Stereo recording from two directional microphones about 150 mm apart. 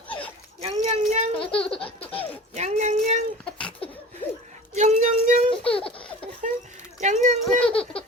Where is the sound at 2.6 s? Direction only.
50° right (ahead or behind).